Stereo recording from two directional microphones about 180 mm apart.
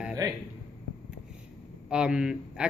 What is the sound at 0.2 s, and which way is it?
Speech, 20° right (ahead or behind).